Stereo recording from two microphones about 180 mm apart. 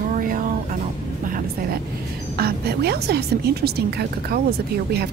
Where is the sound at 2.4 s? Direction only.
60° right (ahead or behind).